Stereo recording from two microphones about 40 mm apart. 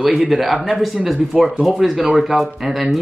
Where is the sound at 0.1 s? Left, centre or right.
Centre.